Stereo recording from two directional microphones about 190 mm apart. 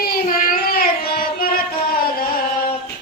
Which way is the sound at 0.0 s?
50° left (ahead or behind).